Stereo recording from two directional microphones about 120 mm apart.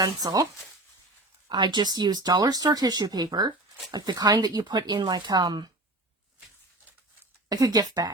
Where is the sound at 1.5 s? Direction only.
35° right (ahead or behind).